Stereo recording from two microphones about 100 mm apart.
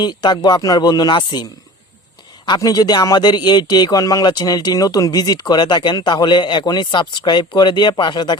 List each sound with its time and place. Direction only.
0.0 s speech: 45° left (ahead or behind)
2.6 s speech: 40° left (ahead or behind)